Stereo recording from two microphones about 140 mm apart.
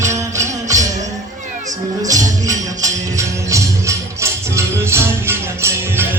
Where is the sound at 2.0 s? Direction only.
25° right (ahead or behind).